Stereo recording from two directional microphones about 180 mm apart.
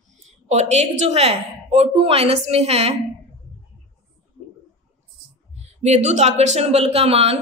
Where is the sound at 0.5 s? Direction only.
40° right (ahead or behind).